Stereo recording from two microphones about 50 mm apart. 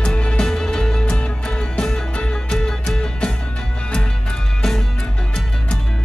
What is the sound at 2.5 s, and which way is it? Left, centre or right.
Music, centre.